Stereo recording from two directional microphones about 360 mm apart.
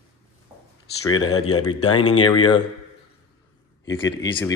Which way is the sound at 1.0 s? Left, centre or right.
Left.